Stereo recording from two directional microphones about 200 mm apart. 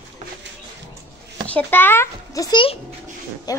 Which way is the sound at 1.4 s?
10° left (ahead or behind).